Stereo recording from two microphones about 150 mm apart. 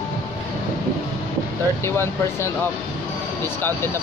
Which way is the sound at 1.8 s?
15° left (ahead or behind).